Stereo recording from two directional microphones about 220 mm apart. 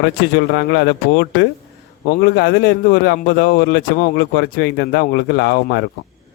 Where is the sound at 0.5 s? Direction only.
50° left (ahead or behind).